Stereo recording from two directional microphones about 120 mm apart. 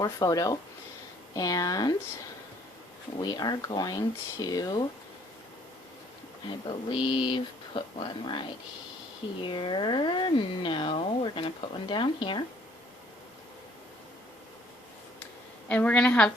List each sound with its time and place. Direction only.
0.0 s speech: 30° left (ahead or behind)
3.2 s speech: 35° left (ahead or behind)
6.5 s speech: 45° left (ahead or behind)
9.5 s speech: 40° left (ahead or behind)
15.7 s a woman's voice: 10° left (ahead or behind)